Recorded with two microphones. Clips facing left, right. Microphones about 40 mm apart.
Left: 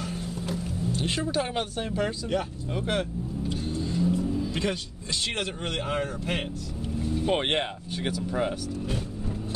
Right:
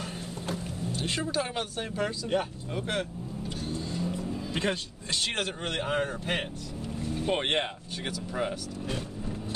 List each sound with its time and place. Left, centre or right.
0.9 s speech: centre
3.8 s vehicle: centre
4.4 s speech: right
7.2 s speech: centre